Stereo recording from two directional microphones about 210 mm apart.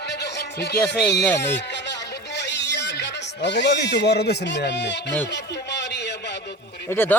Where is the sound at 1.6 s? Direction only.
55° left (ahead or behind).